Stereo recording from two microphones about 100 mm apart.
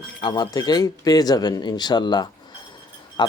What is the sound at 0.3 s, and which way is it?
Speech, 40° left (ahead or behind).